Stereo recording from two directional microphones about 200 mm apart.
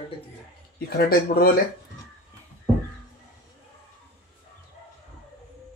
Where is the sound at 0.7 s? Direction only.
50° left (ahead or behind).